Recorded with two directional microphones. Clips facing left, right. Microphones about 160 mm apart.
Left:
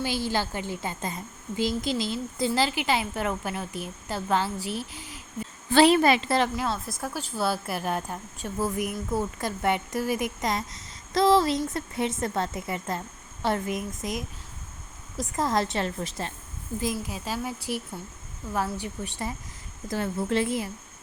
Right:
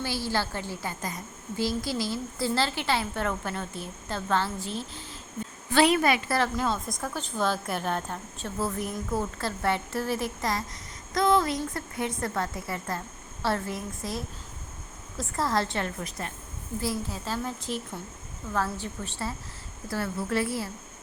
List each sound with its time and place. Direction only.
0.0 s a woman's voice: 15° left (ahead or behind)
5.7 s speech: 30° left (ahead or behind)
6.9 s a woman's voice: 5° left (ahead or behind); by 16.3 s 25° left (ahead or behind)
16.8 s a woman's voice: 15° left (ahead or behind)